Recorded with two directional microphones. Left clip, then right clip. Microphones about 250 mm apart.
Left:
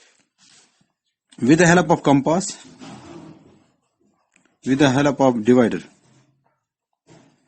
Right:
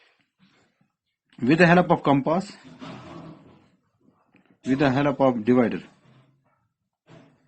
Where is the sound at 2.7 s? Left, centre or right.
Centre.